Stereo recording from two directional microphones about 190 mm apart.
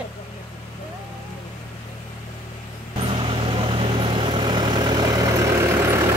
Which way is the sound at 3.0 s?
30° right (ahead or behind).